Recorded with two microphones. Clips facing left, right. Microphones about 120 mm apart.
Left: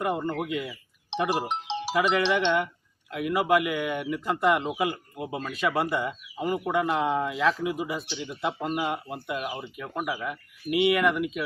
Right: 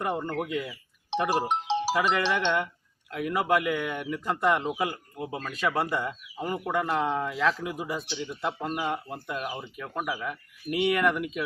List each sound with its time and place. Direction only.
0.0 s speech: 5° left (ahead or behind)
1.5 s speech: 40° right (ahead or behind)
2.0 s speech: 5° left (ahead or behind)